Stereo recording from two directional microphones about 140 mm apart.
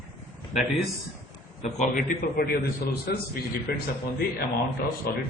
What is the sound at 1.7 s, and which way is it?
Speech, 85° left.